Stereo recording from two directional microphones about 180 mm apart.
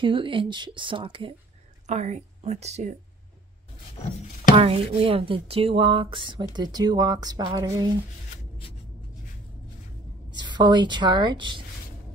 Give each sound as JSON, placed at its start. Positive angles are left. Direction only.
{"t": 0.0, "sound": "speech", "side_deg": -30}
{"t": 1.9, "sound": "a woman's voice", "side_deg": -40}
{"t": 4.5, "sound": "speech", "side_deg": -30}
{"t": 10.3, "sound": "speech", "side_deg": -25}